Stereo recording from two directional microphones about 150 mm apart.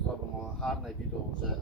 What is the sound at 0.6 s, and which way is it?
Speech, centre (ahead or behind).